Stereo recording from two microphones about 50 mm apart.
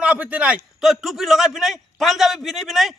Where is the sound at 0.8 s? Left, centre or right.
Centre.